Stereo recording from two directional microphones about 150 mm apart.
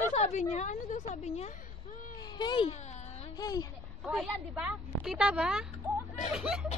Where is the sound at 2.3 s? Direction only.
30° left (ahead or behind).